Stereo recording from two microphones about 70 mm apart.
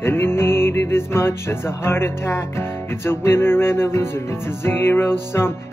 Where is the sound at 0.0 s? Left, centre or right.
Left.